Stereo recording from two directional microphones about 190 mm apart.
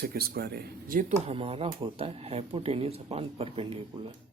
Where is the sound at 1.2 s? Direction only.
30° right (ahead or behind).